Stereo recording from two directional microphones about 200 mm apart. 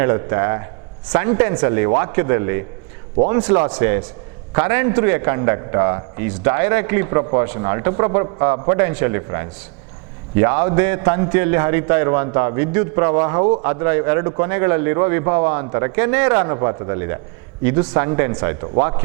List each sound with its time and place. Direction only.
0.0 s a man's voice: 15° right (ahead or behind)